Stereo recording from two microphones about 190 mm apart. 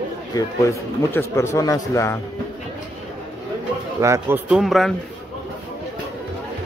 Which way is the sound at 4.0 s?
15° right (ahead or behind).